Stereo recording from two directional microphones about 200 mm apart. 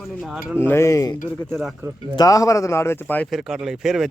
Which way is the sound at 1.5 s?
5° right (ahead or behind).